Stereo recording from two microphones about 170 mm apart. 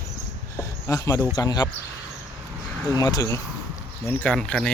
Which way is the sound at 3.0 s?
20° left (ahead or behind).